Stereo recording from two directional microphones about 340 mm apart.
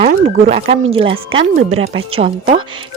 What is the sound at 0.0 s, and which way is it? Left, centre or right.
Speech, centre.